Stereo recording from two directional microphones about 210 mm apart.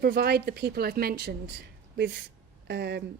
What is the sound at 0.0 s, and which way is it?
A woman's voice, 50° right (ahead or behind).